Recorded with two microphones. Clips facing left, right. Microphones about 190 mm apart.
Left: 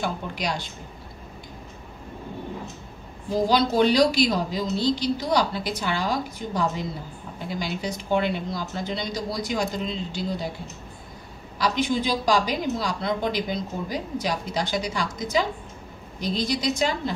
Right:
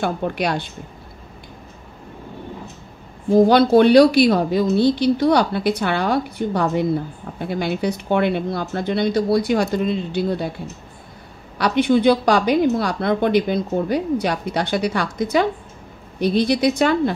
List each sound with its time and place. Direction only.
0.0 s a woman's voice: 60° right (ahead or behind)
3.3 s a woman's voice: 60° right (ahead or behind)
11.5 s a woman's voice: 60° right (ahead or behind)